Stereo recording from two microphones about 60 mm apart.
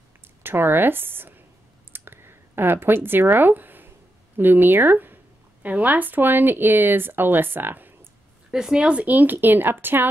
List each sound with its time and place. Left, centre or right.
0.4 s speech: right
1.9 s a sound: right
5.7 s speech: right
8.5 s speech: centre
9.0 s speech: right